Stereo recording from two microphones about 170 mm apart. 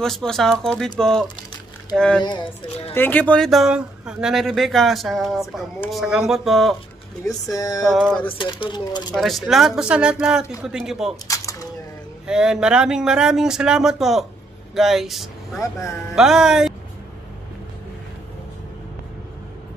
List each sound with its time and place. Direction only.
0.0 s speech: centre (ahead or behind)
2.2 s speech: 30° left (ahead or behind)
2.9 s speech: 10° left (ahead or behind)
7.2 s speech: 20° left (ahead or behind)
7.8 s speech: centre (ahead or behind)
8.4 s speech: 30° left (ahead or behind)
9.1 s speech: centre (ahead or behind)
11.2 s a sound: 20° left (ahead or behind)
12.3 s speech: 5° right (ahead or behind)
15.6 s a man's voice: 15° left (ahead or behind)
16.2 s speech: 5° right (ahead or behind)